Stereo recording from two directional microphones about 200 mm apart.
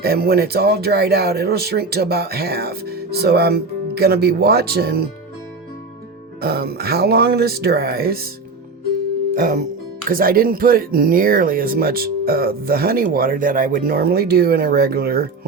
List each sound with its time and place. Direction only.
0.0 s speech: 50° right (ahead or behind)
6.4 s speech: 50° right (ahead or behind)
9.3 s speech: 45° right (ahead or behind)